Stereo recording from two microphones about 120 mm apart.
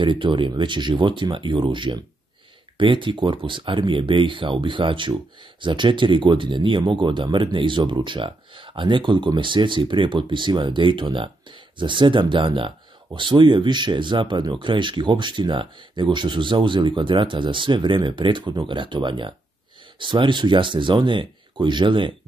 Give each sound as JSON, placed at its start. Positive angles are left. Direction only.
{"t": 0.0, "sound": "speech", "side_deg": -45}